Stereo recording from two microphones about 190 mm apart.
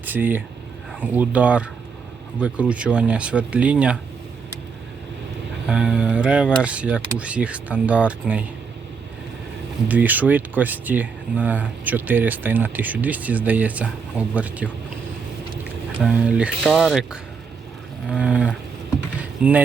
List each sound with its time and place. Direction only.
0.0 s speech: 10° right (ahead or behind)
5.6 s speech: 5° right (ahead or behind)
9.9 s speech: 10° right (ahead or behind)
16.0 s speech: 5° right (ahead or behind)